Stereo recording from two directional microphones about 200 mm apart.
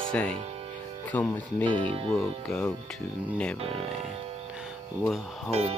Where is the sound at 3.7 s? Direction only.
35° right (ahead or behind).